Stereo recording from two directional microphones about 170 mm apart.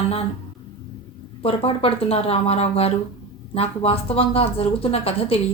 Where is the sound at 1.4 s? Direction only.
35° left (ahead or behind).